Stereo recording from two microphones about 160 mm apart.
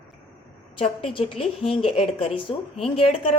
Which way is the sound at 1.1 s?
35° left (ahead or behind).